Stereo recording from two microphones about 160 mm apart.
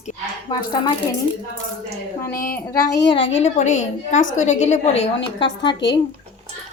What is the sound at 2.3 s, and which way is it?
Speech, 60° left (ahead or behind).